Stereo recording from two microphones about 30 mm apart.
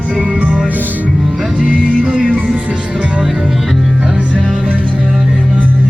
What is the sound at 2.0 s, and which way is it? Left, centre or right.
Speech, right.